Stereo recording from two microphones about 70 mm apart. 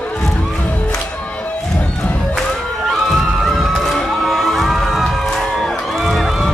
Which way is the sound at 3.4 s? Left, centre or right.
Centre.